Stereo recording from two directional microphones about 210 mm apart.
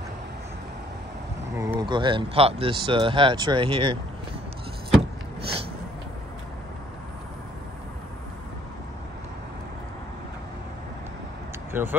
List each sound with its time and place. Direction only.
1.6 s speech: 15° right (ahead or behind)
11.7 s speech: 10° right (ahead or behind)